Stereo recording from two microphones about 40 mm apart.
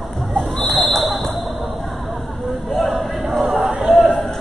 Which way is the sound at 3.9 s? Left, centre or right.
Centre.